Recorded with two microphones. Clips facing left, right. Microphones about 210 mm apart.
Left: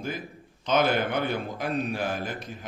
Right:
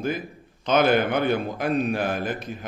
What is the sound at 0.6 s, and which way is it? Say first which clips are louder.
A man's voice: right 4 dB; 60° right (ahead or behind).